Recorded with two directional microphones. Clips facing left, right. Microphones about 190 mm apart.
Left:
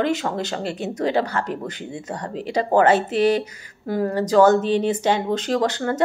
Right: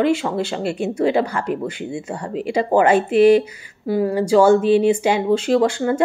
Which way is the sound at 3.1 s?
40° left (ahead or behind).